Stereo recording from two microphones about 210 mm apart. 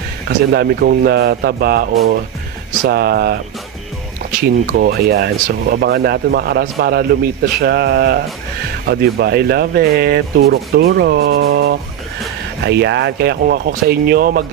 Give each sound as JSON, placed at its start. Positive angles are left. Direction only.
{"t": 0.3, "sound": "speech", "side_deg": -50}
{"t": 4.6, "sound": "speech", "side_deg": -45}